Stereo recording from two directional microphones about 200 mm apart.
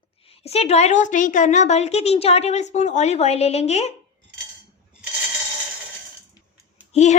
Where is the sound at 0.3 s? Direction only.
30° left (ahead or behind).